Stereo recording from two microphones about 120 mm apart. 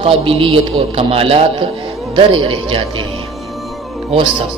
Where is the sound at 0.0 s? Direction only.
50° right (ahead or behind).